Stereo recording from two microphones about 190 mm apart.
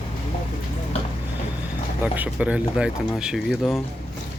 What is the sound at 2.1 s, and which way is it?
Speech, 10° right (ahead or behind).